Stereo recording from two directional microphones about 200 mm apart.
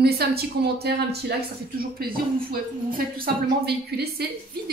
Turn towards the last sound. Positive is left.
turn(degrees=-50)  # may be behind; listen again after turning